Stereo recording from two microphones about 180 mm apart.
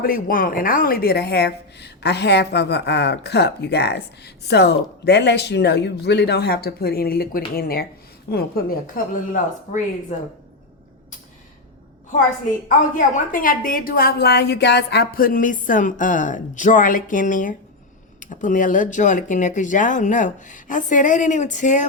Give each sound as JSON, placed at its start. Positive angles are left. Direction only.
{"t": 0.0, "sound": "a woman's voice", "side_deg": 50}
{"t": 10.1, "sound": "a woman's voice", "side_deg": 45}
{"t": 12.6, "sound": "a woman's voice", "side_deg": 45}